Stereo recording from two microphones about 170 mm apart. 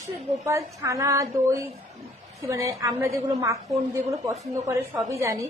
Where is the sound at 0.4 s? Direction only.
20° right (ahead or behind).